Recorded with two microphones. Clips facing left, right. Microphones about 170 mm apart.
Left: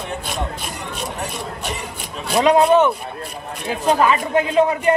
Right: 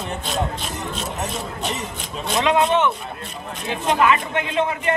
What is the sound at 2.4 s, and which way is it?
A man's voice, 35° left (ahead or behind).